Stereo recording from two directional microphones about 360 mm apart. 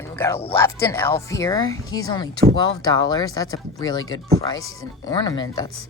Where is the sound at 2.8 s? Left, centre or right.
Centre.